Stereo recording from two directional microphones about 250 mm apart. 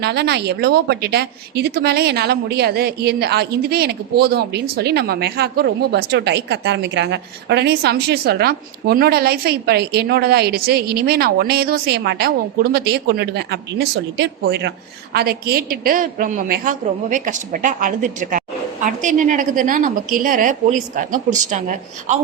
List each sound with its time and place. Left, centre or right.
0.0 s a woman's voice: right